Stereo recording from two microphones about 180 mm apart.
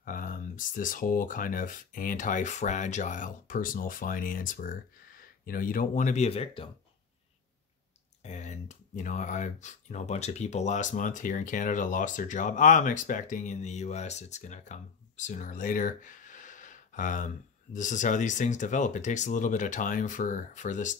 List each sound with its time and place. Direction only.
0.0 s speech: 50° left (ahead or behind); by 6.7 s 30° left (ahead or behind)
8.2 s speech: 40° left (ahead or behind)